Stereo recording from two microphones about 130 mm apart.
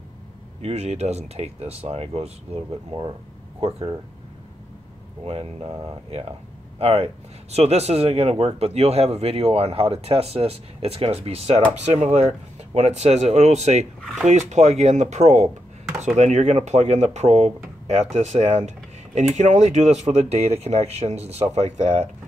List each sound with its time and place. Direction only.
0.6 s speech: 55° right (ahead or behind)
5.2 s speech: 50° right (ahead or behind)